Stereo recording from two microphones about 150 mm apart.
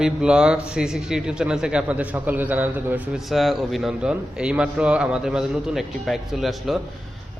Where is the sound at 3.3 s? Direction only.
Centre (ahead or behind).